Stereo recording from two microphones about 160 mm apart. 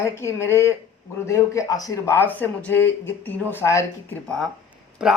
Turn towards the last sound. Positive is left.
turn(degrees=-5)  # may be behind; listen again after turning